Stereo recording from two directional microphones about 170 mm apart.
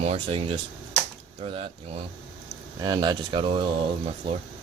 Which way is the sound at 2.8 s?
25° right (ahead or behind).